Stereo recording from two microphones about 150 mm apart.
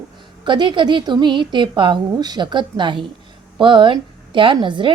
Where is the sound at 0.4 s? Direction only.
30° right (ahead or behind).